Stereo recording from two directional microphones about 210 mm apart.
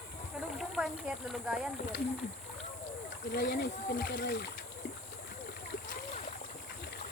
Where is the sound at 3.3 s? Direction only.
50° left (ahead or behind).